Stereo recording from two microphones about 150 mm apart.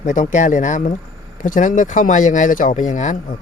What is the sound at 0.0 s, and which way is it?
Speech, 60° left (ahead or behind).